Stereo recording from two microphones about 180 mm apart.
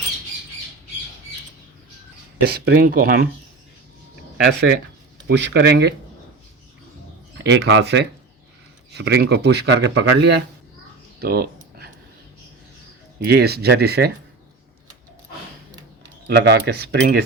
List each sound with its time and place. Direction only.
2.5 s speech: 55° right (ahead or behind)
4.4 s speech: 65° right (ahead or behind)
7.4 s speech: 75° right (ahead or behind)
11.2 s a sound: 60° right (ahead or behind)
13.1 s speech: 60° right (ahead or behind)
16.2 s speech: 65° right (ahead or behind)